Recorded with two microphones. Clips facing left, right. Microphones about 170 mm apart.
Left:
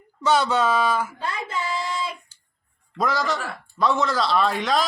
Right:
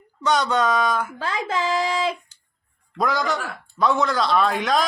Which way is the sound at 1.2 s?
90° right.